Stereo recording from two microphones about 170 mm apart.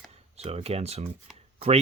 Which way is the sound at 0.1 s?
35° right (ahead or behind).